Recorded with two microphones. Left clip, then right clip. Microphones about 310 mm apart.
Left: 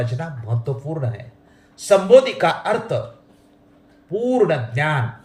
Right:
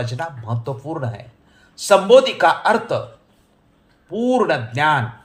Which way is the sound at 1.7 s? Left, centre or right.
Centre.